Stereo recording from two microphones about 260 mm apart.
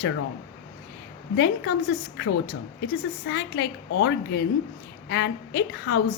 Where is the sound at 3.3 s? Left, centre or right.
Left.